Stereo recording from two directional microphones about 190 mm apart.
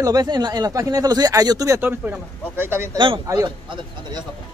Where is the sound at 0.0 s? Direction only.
20° right (ahead or behind).